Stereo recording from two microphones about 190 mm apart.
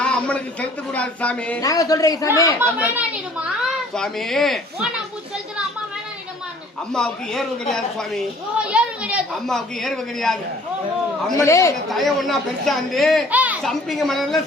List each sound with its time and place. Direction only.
0.0 s speech: 5° left (ahead or behind)
1.6 s speech: 20° left (ahead or behind)
2.6 s a woman's voice: 10° right (ahead or behind)
6.9 s a woman's voice: centre (ahead or behind)
11.3 s speech: 15° left (ahead or behind)
11.9 s a woman's voice: centre (ahead or behind)